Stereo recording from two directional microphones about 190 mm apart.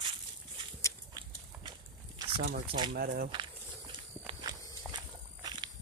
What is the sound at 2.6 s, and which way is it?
Speech, 25° right (ahead or behind).